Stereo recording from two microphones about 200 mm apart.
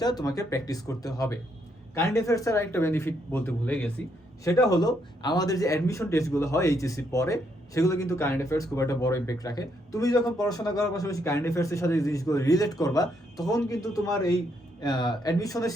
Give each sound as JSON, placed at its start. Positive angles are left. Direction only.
{"t": 0.0, "sound": "a man's voice", "side_deg": 20}
{"t": 4.4, "sound": "a man's voice", "side_deg": 20}